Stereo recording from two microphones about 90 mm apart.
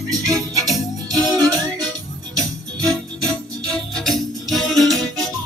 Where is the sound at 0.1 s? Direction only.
40° right (ahead or behind).